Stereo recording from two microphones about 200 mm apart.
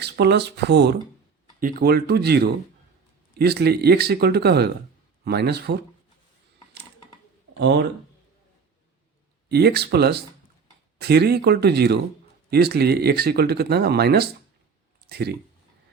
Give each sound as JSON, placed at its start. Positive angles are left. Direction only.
{"t": 0.0, "sound": "speech", "side_deg": -55}
{"t": 1.5, "sound": "speech", "side_deg": -45}
{"t": 7.6, "sound": "speech", "side_deg": -60}
{"t": 9.5, "sound": "speech", "side_deg": -55}